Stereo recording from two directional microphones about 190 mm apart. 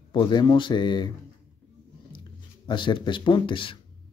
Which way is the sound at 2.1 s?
25° left (ahead or behind).